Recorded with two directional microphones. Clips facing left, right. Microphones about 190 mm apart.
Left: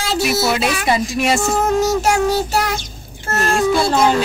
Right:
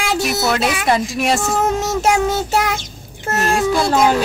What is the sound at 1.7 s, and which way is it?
Child singing, 20° right (ahead or behind).